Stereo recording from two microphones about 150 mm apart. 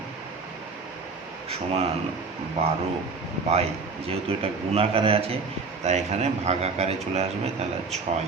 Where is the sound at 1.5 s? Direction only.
40° right (ahead or behind).